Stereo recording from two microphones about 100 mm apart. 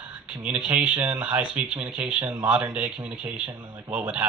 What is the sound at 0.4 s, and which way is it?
Speech, 15° right (ahead or behind).